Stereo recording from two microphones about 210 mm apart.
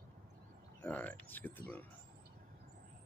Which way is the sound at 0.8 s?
5° left (ahead or behind).